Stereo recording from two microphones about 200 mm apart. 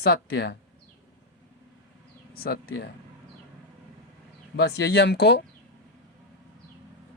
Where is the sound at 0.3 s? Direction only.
60° left (ahead or behind).